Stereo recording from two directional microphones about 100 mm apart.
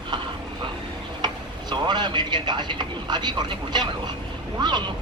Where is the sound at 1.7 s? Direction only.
50° right (ahead or behind).